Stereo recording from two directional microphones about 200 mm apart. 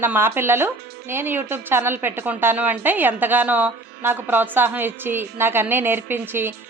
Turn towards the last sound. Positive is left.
turn(degrees=-10)  # may be behind; listen again after turning